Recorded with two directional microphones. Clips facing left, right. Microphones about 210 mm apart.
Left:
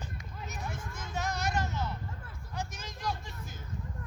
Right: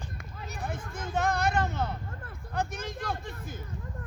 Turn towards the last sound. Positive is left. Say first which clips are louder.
# right 5 dB
turn(degrees=-55)  # may be behind; listen again after turning